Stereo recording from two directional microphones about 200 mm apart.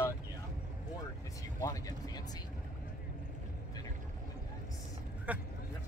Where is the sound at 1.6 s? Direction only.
15° left (ahead or behind).